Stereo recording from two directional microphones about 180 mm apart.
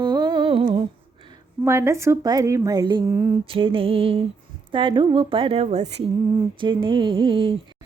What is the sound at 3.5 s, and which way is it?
Music, 30° right (ahead or behind).